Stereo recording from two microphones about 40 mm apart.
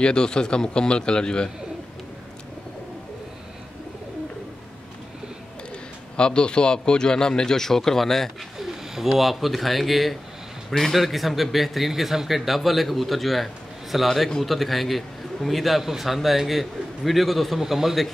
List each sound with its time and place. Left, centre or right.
0.0 s a man's voice: centre
6.1 s a man's voice: left; by 8.3 s centre
8.5 s speech: centre